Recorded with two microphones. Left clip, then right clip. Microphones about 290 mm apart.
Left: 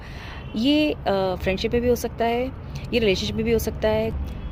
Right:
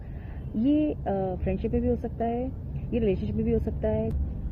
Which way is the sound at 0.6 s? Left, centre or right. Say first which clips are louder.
Left 5 dB; left.